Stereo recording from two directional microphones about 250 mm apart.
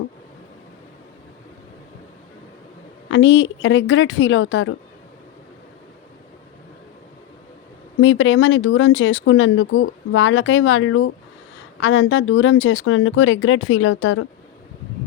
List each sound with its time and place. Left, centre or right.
3.1 s speech: left
8.0 s speech: left